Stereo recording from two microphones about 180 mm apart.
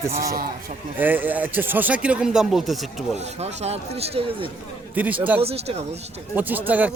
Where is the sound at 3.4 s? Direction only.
35° right (ahead or behind).